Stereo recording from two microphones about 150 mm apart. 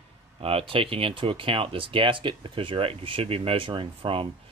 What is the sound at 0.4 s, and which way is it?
Speech, 40° right (ahead or behind).